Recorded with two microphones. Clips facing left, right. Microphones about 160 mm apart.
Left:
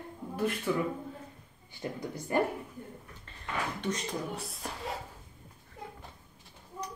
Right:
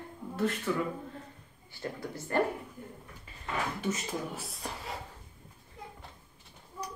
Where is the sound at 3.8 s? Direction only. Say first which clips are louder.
Even; 5° right (ahead or behind).